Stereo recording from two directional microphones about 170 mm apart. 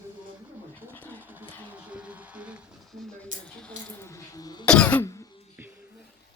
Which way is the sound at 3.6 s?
5° left (ahead or behind).